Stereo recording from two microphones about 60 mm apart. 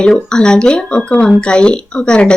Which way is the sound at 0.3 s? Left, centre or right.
Centre.